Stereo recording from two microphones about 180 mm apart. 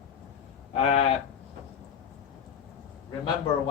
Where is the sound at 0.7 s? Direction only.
35° left (ahead or behind).